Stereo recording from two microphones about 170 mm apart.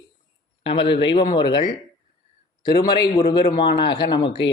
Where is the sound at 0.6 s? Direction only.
30° left (ahead or behind).